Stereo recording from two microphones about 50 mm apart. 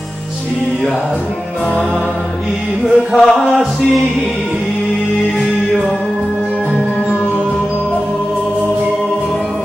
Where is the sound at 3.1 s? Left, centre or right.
Centre.